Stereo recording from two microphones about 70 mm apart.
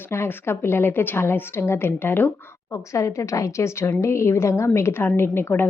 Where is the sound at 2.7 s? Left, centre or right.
Left.